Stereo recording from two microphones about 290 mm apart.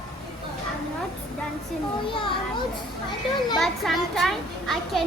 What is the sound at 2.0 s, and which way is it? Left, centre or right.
Speech, centre.